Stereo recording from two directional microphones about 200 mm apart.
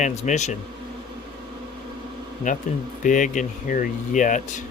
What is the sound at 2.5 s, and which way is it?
Speech, 40° left (ahead or behind).